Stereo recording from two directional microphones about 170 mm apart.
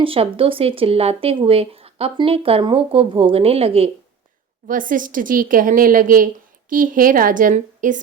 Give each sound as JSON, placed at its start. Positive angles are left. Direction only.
{"t": 0.0, "sound": "speech", "side_deg": -30}
{"t": 4.7, "sound": "a woman's voice", "side_deg": -50}